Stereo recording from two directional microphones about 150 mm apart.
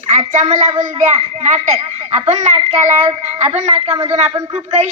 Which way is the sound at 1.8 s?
45° right (ahead or behind).